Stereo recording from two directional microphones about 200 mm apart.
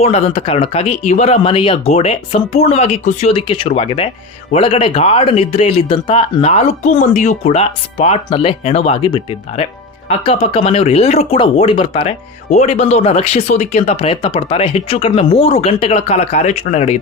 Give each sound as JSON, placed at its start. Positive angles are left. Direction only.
{"t": 0.0, "sound": "speech", "side_deg": 30}